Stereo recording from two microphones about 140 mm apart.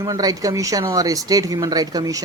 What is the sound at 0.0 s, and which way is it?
Speech, 25° right (ahead or behind).